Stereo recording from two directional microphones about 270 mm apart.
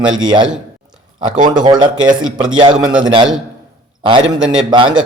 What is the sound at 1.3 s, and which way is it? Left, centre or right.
Speech, right.